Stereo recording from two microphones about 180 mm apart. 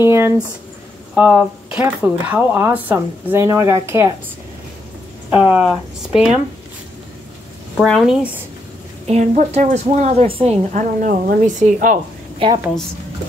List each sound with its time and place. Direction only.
0.0 s speech: 15° right (ahead or behind)
5.3 s speech: 5° right (ahead or behind)
7.7 s speech: 5° left (ahead or behind)
9.0 s a woman's voice: 35° right (ahead or behind)
10.7 s a woman's voice: 50° right (ahead or behind)
12.4 s a woman's voice: 30° right (ahead or behind)